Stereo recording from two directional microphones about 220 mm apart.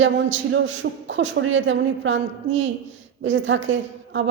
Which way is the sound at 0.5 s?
55° right (ahead or behind).